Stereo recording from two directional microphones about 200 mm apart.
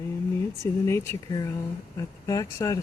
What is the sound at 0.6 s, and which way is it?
Speech, 15° left (ahead or behind).